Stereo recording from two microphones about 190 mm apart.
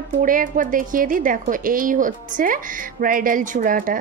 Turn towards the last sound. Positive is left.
turn(degrees=-45)  # may be behind; listen again after turning